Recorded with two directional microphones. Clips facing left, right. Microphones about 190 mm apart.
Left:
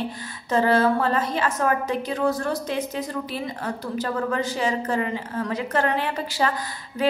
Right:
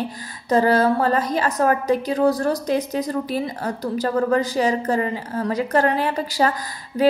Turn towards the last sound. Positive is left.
turn(degrees=-40)  # may be behind; listen again after turning